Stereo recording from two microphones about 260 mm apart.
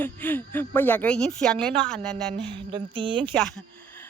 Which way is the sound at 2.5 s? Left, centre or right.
Centre.